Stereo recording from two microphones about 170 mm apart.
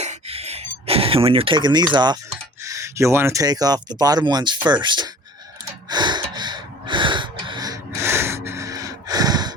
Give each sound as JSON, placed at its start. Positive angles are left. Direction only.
{"t": 0.0, "sound": "a sound", "side_deg": -40}
{"t": 2.6, "sound": "speech", "side_deg": -15}
{"t": 5.9, "sound": "gasp", "side_deg": -25}